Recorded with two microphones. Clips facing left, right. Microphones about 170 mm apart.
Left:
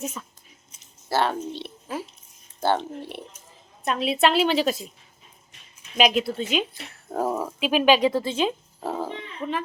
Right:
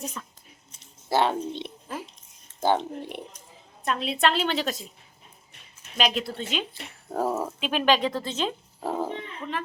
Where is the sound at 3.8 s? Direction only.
5° left (ahead or behind).